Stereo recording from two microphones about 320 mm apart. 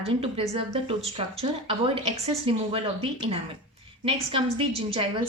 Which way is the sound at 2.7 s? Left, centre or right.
Centre.